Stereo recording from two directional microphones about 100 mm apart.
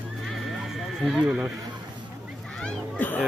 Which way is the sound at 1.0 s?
5° left (ahead or behind).